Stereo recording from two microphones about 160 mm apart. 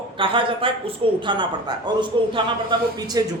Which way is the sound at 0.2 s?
35° right (ahead or behind).